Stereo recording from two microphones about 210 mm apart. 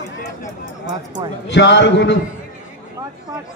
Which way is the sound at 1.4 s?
55° left (ahead or behind).